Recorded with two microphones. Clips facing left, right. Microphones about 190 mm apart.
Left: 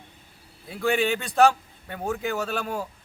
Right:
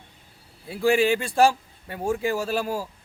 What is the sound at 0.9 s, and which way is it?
A man's voice, 5° right (ahead or behind).